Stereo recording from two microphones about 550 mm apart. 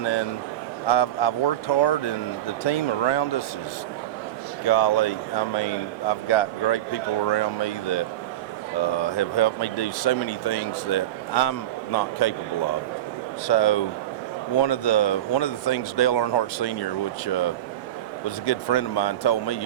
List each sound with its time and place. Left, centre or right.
0.0 s speech: left
4.6 s speech: left
13.5 s speech: left
18.7 s speech: left